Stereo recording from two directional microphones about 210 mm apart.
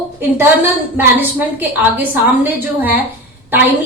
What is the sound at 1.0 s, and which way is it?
A woman's voice, 10° right (ahead or behind).